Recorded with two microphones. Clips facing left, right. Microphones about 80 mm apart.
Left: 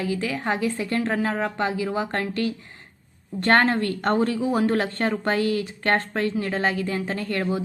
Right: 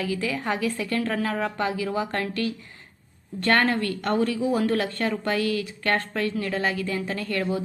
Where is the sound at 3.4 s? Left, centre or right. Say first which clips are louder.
Left 3 dB; left.